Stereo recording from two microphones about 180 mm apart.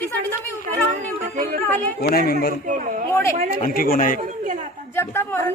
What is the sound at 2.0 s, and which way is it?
Speech, 55° left (ahead or behind).